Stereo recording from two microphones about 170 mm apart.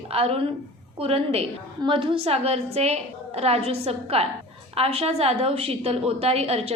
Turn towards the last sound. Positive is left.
turn(degrees=-35)  # may be behind; listen again after turning